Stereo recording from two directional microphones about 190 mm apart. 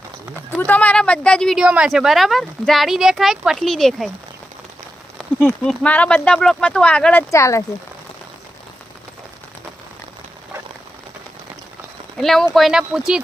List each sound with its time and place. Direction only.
0.5 s speech: 10° left (ahead or behind)
5.5 s speech: 10° left (ahead or behind)
12.1 s speech: centre (ahead or behind)